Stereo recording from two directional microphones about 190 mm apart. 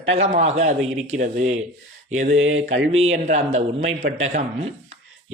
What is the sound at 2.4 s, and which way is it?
Mantra, 90° right.